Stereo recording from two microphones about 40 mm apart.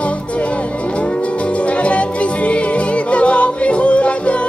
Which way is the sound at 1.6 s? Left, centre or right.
Left.